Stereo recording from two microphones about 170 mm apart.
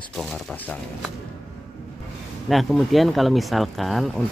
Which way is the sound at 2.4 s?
Centre (ahead or behind).